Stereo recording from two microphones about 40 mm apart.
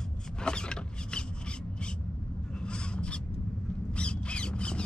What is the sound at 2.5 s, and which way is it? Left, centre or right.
Rub, left.